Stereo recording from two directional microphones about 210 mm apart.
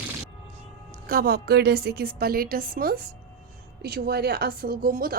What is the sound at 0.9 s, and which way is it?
A woman's voice, 45° right (ahead or behind).